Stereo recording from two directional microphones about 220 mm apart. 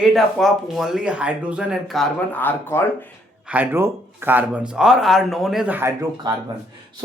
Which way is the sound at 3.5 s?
5° right (ahead or behind).